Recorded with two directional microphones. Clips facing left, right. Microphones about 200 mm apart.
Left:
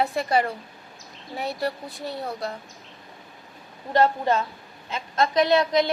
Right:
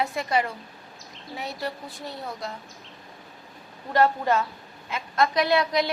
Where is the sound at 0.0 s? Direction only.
35° left (ahead or behind).